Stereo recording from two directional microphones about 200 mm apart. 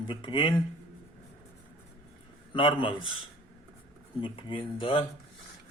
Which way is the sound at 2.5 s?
25° left (ahead or behind).